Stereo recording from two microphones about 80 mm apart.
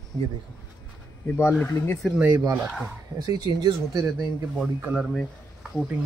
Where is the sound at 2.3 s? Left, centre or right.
Right.